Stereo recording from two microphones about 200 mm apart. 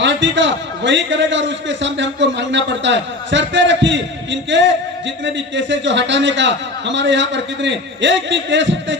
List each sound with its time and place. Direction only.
0.0 s a man's voice: 65° right (ahead or behind)